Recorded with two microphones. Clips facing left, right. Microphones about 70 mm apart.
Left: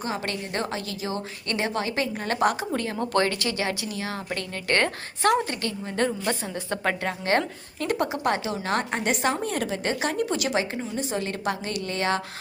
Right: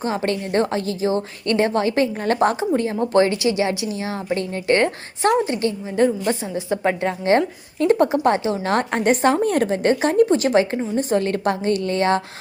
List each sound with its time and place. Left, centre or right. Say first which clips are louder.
0.3 s a woman's voice: right 9 dB; right